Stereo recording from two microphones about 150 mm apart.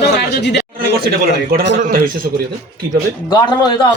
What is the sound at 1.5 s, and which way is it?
Speech, 70° right (ahead or behind).